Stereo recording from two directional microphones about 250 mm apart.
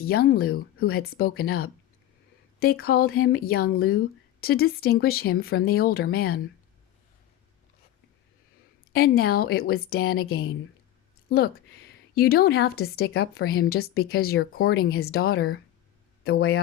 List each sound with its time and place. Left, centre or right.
0.0 s a woman's voice: left
8.9 s a woman's voice: left